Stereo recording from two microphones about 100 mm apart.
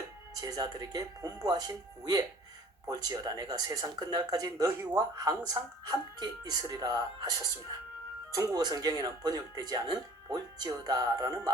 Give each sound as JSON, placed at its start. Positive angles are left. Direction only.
{"t": 0.3, "sound": "speech", "side_deg": -40}
{"t": 8.5, "sound": "speech", "side_deg": -40}